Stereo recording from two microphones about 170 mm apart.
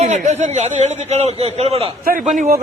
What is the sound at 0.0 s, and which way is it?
A man's voice, 40° right (ahead or behind).